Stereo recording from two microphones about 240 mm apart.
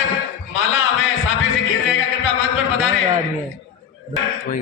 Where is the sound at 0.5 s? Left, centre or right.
Left.